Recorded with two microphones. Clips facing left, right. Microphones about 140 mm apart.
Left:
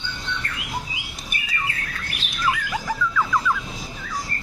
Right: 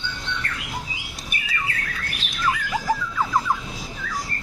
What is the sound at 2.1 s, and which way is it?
Squawk, centre (ahead or behind).